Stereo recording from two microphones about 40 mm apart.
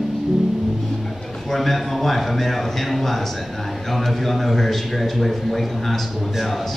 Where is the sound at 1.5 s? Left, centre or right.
Centre.